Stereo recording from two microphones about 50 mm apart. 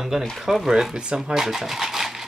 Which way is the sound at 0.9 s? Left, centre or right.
Centre.